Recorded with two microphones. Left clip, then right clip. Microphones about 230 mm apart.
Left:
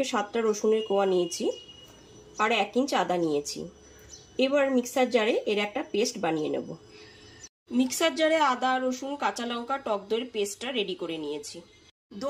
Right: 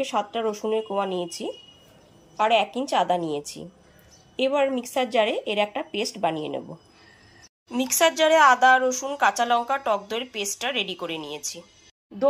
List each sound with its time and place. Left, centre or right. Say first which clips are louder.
0.0 s speech: right 2 dB; centre
7.7 s speech: right 5 dB; centre